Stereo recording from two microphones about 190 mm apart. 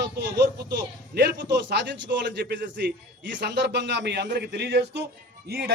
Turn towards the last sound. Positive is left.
turn(degrees=-55)  # may be behind; listen again after turning